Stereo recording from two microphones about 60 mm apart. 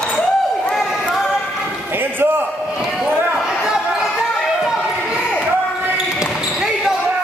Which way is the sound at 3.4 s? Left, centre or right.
Centre.